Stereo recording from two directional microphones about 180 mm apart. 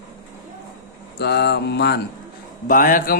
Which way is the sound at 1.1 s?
65° left (ahead or behind).